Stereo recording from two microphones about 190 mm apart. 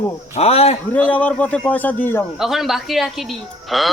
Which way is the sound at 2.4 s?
Centre (ahead or behind).